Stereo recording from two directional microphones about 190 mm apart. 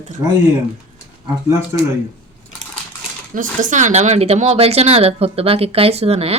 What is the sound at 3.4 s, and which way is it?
Speech, 40° right (ahead or behind).